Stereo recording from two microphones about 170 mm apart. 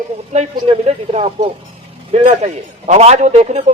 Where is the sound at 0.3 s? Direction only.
40° right (ahead or behind).